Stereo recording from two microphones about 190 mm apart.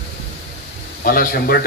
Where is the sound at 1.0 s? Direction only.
50° left (ahead or behind).